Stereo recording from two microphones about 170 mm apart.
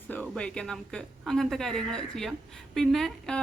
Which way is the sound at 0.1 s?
5° left (ahead or behind).